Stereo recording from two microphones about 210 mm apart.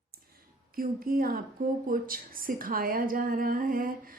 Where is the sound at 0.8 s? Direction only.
45° right (ahead or behind).